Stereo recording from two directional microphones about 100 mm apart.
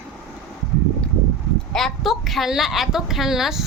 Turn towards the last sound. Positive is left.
turn(degrees=-5)  # may be behind; listen again after turning